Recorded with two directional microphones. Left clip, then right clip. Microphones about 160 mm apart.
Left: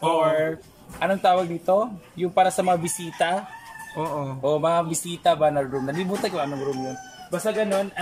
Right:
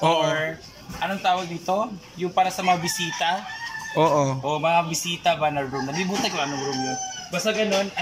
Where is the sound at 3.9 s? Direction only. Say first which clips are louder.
Right 9 dB; centre (ahead or behind).